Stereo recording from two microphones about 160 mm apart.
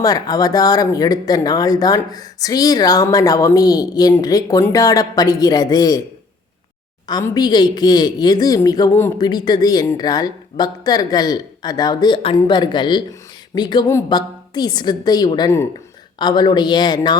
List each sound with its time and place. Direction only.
0.0 s speech: 25° left (ahead or behind)
7.1 s speech: 20° left (ahead or behind)